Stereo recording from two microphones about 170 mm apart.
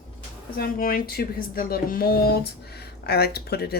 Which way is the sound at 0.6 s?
55° left (ahead or behind).